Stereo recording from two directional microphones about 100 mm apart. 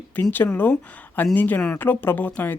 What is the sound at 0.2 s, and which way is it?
Speech, 20° left (ahead or behind).